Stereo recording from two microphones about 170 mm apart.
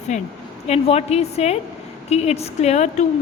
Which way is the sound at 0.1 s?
45° left (ahead or behind).